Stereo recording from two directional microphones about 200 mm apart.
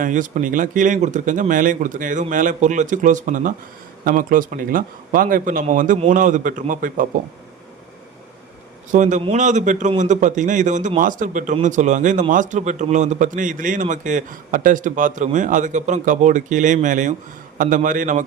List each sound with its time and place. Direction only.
0.0 s a man's voice: 40° right (ahead or behind)
8.9 s a man's voice: 40° right (ahead or behind)